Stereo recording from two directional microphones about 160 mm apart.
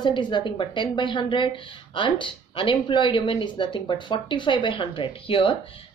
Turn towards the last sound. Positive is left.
turn(degrees=35)  # may be behind; listen again after turning